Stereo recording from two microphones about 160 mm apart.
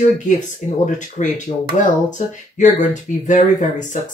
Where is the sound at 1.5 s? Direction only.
35° left (ahead or behind).